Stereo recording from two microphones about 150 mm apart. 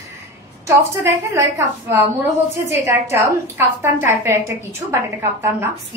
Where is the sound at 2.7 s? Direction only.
20° right (ahead or behind).